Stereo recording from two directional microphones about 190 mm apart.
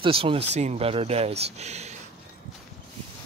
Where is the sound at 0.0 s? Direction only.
30° right (ahead or behind).